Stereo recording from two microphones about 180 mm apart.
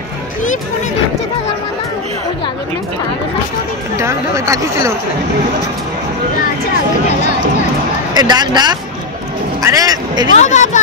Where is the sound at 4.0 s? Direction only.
15° right (ahead or behind).